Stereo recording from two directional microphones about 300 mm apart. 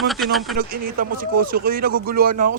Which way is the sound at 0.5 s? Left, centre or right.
Right.